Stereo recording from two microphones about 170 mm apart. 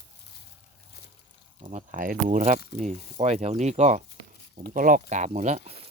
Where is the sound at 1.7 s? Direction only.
55° right (ahead or behind).